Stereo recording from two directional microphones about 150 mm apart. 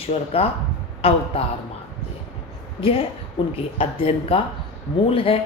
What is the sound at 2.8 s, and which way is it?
Speech, 40° left (ahead or behind).